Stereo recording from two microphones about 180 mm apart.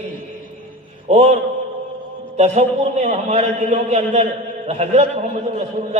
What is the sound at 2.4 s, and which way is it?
A man's voice, 40° right (ahead or behind).